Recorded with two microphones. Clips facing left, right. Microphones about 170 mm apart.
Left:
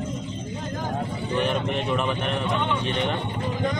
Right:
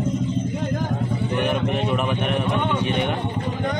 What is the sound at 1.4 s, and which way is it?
Speech, 10° right (ahead or behind).